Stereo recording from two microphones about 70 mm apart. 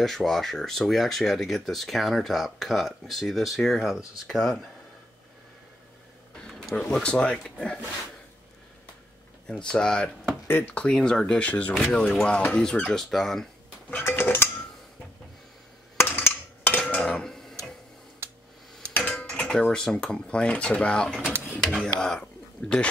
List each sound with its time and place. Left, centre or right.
0.0 s speech: centre
6.3 s speech: centre
9.5 s speech: centre
11.9 s speech: centre
13.8 s dishes: left
16.0 s a sound: left
16.9 s tick-tock: centre
18.9 s a sound: left
19.2 s dishes: centre
19.7 s speech: centre